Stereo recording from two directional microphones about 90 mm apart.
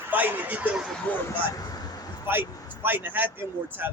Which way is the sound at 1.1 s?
15° left (ahead or behind).